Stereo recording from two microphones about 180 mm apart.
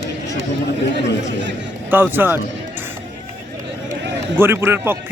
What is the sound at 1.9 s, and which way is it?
Speech, 10° right (ahead or behind).